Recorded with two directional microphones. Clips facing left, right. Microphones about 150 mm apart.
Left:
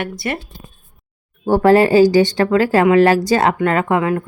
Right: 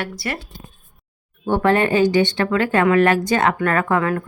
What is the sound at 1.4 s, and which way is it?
Speech, 35° left (ahead or behind).